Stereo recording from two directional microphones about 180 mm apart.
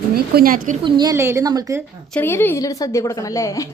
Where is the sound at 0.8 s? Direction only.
25° right (ahead or behind).